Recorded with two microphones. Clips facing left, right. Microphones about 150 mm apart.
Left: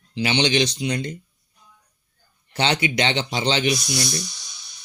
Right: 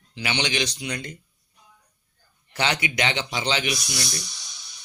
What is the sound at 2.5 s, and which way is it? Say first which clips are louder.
Speech: left 4 dB; 30° left (ahead or behind).